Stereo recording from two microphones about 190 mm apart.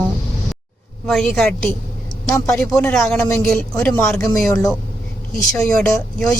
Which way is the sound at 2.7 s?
5° left (ahead or behind).